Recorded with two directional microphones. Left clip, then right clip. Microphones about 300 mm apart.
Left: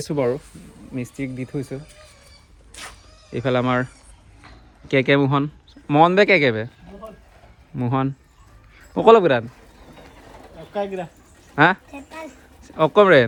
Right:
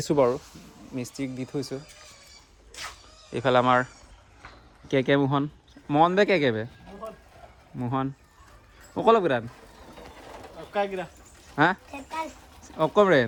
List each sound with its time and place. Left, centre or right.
0.0 s speech: right
0.3 s speech: centre
3.2 s speech: centre
7.8 s speech: centre
10.6 s speech: centre